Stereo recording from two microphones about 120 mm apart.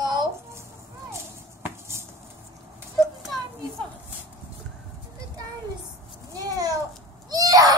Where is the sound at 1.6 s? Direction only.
20° right (ahead or behind).